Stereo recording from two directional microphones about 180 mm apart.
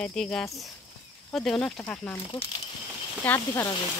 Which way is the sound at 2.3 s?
30° left (ahead or behind).